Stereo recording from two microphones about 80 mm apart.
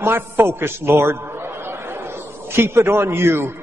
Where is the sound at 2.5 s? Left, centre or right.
Right.